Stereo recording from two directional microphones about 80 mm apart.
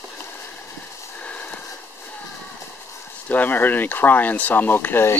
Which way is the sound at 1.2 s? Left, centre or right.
Centre.